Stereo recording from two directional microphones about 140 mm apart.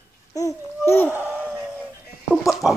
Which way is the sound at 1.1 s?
10° right (ahead or behind).